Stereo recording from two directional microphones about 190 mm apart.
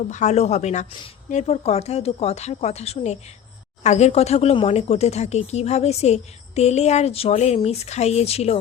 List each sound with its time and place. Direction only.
0.1 s speech: 35° left (ahead or behind)